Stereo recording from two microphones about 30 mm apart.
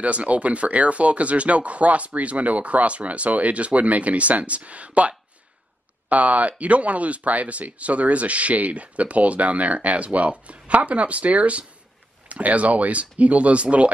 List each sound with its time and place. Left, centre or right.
0.0 s speech: right